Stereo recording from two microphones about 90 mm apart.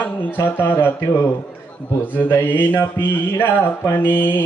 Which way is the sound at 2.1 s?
25° left (ahead or behind).